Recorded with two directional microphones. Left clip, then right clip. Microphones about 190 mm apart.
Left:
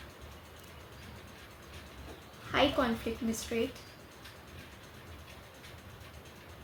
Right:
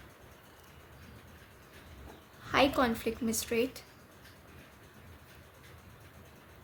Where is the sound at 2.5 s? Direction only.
55° right (ahead or behind).